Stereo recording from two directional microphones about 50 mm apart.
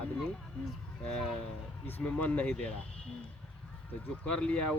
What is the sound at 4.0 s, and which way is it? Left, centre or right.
Speech, left.